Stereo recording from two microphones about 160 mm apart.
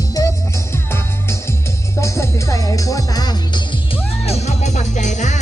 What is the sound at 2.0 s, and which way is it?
Music, 15° left (ahead or behind).